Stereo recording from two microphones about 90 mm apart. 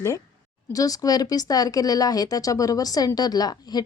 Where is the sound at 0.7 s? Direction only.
40° left (ahead or behind).